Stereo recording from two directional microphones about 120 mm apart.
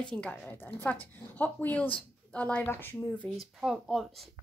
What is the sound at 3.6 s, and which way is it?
Speech, centre (ahead or behind).